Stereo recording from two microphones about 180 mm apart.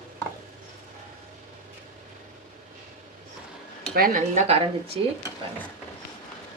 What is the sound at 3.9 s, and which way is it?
A woman's voice, 50° right (ahead or behind).